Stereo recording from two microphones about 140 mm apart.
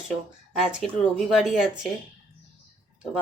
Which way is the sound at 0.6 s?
Centre (ahead or behind).